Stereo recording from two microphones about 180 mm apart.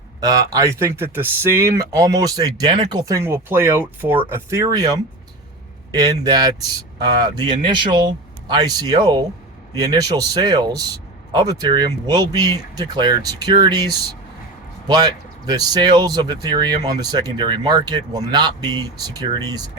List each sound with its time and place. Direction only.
0.2 s speech: 20° right (ahead or behind)